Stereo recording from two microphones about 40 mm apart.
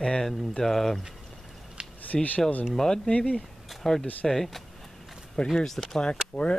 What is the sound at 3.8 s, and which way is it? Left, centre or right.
Speech, centre.